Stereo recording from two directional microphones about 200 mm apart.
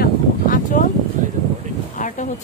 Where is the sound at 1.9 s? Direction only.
40° left (ahead or behind).